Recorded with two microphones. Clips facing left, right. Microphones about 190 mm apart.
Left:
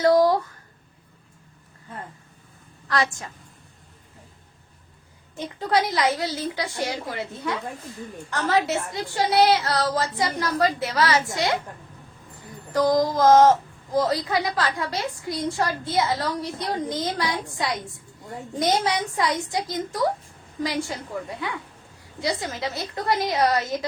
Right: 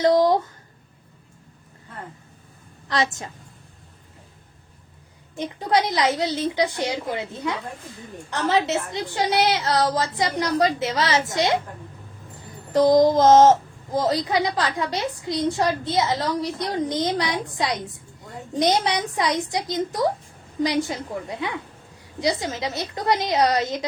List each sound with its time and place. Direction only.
0.0 s a woman's voice: 20° right (ahead or behind)
2.8 s a woman's voice: 20° right (ahead or behind)
5.4 s a woman's voice: 20° right (ahead or behind)
12.7 s a woman's voice: 25° right (ahead or behind)